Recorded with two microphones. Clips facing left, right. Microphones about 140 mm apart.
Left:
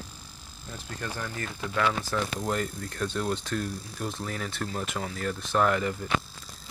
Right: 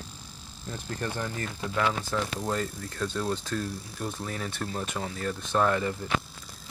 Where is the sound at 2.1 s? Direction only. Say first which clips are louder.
Even; 15° right (ahead or behind).